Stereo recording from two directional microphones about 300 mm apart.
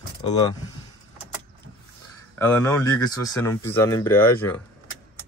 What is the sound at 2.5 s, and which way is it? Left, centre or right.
Speech, centre.